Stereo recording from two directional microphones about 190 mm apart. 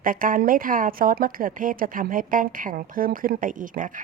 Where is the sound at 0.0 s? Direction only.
45° right (ahead or behind).